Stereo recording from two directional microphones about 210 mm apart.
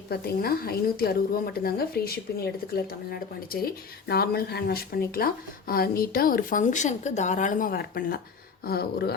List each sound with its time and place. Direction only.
0.1 s a woman's voice: 45° left (ahead or behind)